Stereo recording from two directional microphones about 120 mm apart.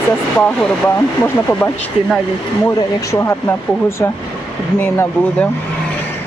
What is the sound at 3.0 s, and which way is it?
Speech, 25° left (ahead or behind).